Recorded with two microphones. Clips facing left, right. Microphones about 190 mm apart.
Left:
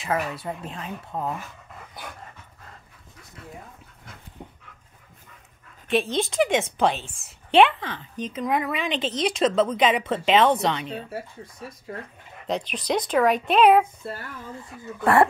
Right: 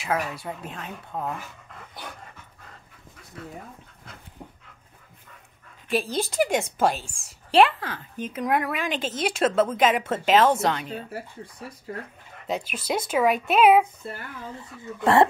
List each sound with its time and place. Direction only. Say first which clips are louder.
0.0 s a woman's voice: left 1 dB; centre (ahead or behind)
5.9 s a woman's voice: left 2 dB; centre (ahead or behind)
12.4 s a woman's voice: left 2 dB; 5° right (ahead or behind)
15.0 s speech: even; 20° right (ahead or behind)